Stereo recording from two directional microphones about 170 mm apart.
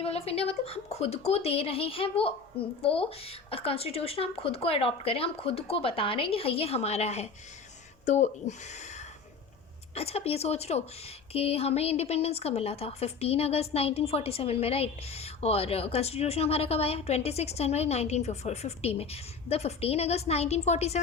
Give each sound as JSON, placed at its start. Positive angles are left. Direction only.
{"t": 0.0, "sound": "a woman's voice", "side_deg": 35}